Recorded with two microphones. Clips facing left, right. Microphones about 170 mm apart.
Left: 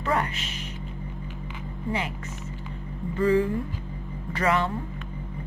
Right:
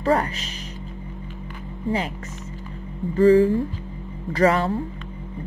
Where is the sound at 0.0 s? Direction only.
35° right (ahead or behind).